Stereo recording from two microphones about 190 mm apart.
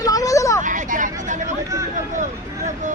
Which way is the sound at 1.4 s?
15° right (ahead or behind).